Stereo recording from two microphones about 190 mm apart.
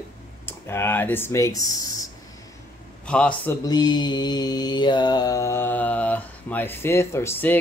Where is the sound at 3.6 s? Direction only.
20° left (ahead or behind).